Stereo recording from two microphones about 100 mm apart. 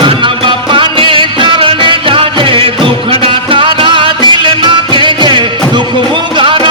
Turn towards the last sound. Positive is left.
turn(degrees=-55)  # may be behind; listen again after turning